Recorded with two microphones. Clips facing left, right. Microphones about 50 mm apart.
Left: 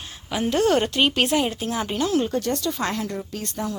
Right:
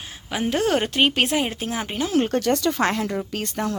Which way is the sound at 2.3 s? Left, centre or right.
Right.